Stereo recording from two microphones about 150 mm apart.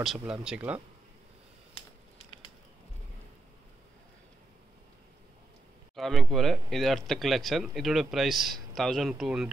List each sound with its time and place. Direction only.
0.2 s speech: 5° right (ahead or behind)
2.1 s a sound: 35° left (ahead or behind)
5.9 s speech: centre (ahead or behind)